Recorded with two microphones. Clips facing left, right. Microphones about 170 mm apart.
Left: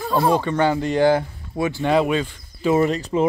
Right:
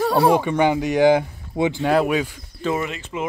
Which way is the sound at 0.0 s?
75° right (ahead or behind).